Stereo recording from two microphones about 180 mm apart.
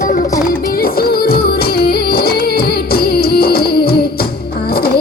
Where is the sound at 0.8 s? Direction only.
55° left (ahead or behind).